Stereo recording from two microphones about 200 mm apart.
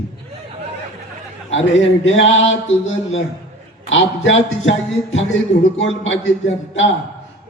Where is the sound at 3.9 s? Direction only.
70° left (ahead or behind).